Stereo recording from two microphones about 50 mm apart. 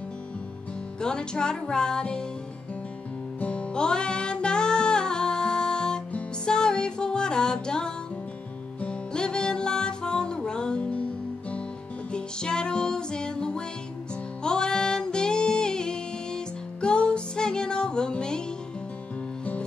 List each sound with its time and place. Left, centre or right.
1.0 s speech: centre
3.3 s music: left
12.1 s music: centre